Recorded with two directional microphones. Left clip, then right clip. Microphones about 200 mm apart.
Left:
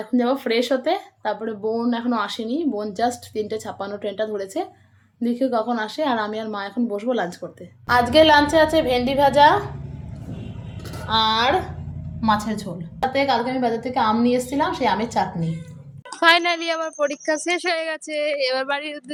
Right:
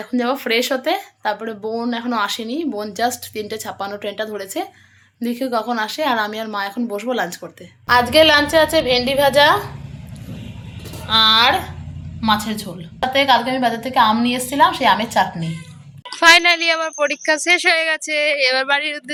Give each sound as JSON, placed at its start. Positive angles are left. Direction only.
{"t": 0.0, "sound": "a woman's voice", "side_deg": 5}
{"t": 11.1, "sound": "a woman's voice", "side_deg": 10}